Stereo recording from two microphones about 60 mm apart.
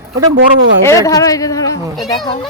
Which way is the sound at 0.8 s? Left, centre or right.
Left.